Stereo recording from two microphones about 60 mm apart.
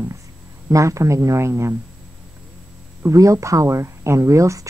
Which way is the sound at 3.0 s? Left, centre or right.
Right.